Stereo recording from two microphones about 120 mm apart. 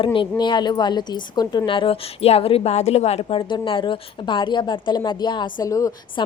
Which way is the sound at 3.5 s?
45° left (ahead or behind).